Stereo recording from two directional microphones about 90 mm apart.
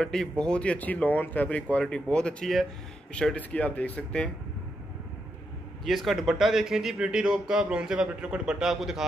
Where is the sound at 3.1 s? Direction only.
15° left (ahead or behind).